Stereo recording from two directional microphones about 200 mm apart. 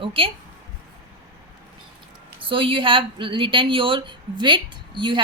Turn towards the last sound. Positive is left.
turn(degrees=-25)  # may be behind; listen again after turning